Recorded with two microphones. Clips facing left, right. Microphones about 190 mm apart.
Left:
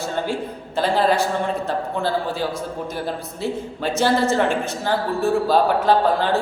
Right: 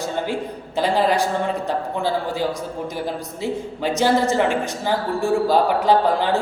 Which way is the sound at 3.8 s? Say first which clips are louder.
Right 1 dB; 15° right (ahead or behind).